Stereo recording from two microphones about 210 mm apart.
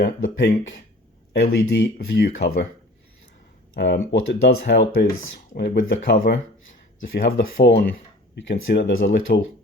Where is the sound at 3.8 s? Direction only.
60° left (ahead or behind).